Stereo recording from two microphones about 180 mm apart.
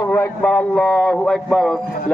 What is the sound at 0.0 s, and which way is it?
Speech, 10° left (ahead or behind).